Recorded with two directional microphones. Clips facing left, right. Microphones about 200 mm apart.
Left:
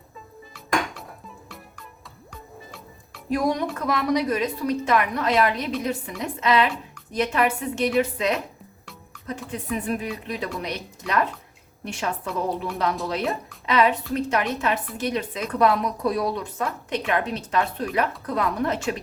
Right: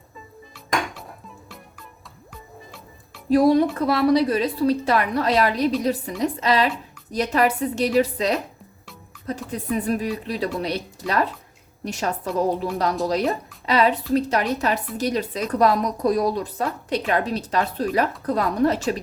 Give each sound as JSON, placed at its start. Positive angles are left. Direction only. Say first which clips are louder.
{"t": 3.2, "sound": "a woman's voice", "louder": "right 7 dB", "side_deg": -30}
{"t": 9.5, "sound": "a woman's voice", "louder": "right 3 dB", "side_deg": -35}
{"t": 12.3, "sound": "a woman's voice", "louder": "right 7 dB", "side_deg": 0}
{"t": 13.7, "sound": "a woman's voice", "louder": "right 2 dB", "side_deg": -35}